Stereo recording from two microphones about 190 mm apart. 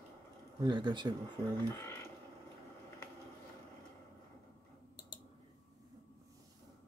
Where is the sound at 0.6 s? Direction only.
25° right (ahead or behind).